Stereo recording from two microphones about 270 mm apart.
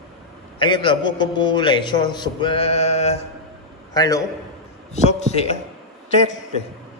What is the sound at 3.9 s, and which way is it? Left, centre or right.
Speech, centre.